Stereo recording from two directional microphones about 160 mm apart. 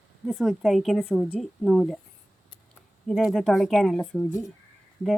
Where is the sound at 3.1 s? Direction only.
Centre (ahead or behind).